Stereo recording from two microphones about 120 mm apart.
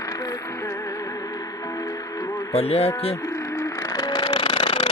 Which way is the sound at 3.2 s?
25° left (ahead or behind).